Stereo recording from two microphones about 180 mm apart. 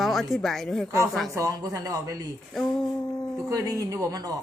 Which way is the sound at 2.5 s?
Centre (ahead or behind).